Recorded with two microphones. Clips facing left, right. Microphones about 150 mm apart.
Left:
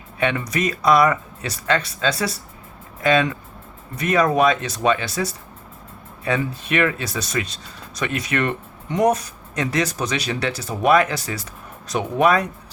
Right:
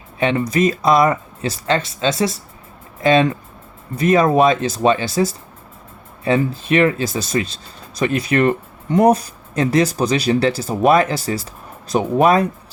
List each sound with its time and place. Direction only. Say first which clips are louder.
0.2 s speech: right 5 dB; 30° right (ahead or behind)